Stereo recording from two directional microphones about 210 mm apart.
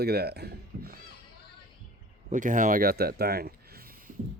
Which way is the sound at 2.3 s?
40° right (ahead or behind).